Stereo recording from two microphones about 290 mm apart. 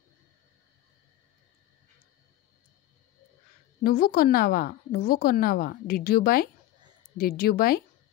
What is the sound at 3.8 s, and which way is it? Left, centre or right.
A woman's voice, left.